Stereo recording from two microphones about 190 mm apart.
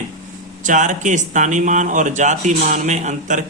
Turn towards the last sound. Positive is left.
turn(degrees=-40)  # may be behind; listen again after turning